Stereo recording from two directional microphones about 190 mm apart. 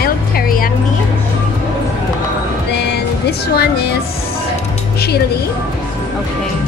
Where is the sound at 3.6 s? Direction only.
55° left (ahead or behind).